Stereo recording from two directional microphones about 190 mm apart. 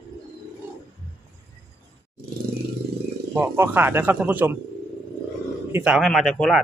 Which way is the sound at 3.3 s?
10° right (ahead or behind).